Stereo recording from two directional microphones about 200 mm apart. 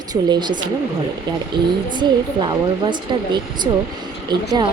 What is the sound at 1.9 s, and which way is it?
A woman's voice, 20° right (ahead or behind).